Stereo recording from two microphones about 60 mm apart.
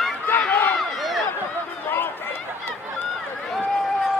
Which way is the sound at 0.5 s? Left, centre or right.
Left.